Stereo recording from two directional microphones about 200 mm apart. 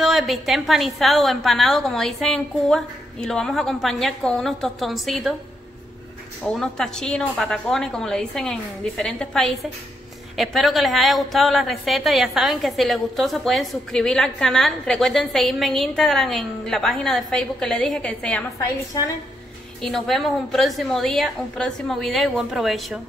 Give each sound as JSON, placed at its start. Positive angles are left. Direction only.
{"t": 0.0, "sound": "a woman's voice", "side_deg": 0}
{"t": 6.4, "sound": "a woman's voice", "side_deg": 5}
{"t": 19.8, "sound": "a woman's voice", "side_deg": 0}